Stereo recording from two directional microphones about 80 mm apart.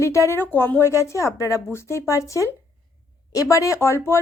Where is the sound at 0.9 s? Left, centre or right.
Left.